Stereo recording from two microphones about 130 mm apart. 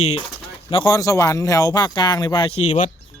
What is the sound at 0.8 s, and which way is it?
Speech, 25° left (ahead or behind).